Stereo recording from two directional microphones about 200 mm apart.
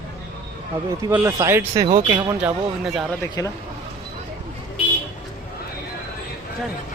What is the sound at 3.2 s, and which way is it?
Speech, 15° left (ahead or behind).